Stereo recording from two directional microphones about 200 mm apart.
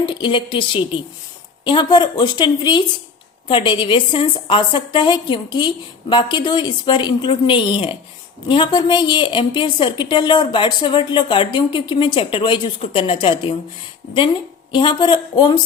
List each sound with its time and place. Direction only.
0.0 s a woman's voice: 25° left (ahead or behind)
14.7 s a woman's voice: 25° left (ahead or behind)